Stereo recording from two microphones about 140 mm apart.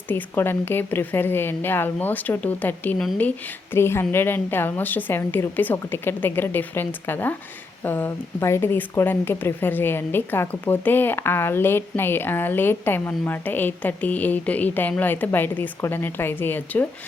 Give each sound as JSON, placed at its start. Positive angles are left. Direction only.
{"t": 0.1, "sound": "speech", "side_deg": 15}